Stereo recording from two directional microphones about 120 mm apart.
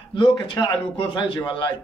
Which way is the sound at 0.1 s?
45° left (ahead or behind).